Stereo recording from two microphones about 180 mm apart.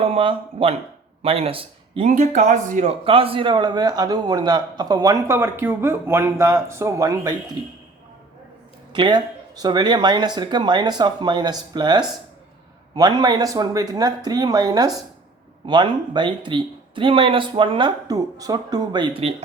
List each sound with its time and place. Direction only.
0.0 s speech: 30° right (ahead or behind)
8.9 s speech: 25° right (ahead or behind)